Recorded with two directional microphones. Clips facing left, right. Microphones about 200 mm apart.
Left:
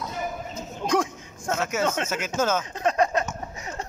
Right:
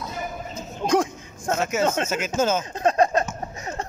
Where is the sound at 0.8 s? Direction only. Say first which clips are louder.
Right 3 dB; 30° right (ahead or behind).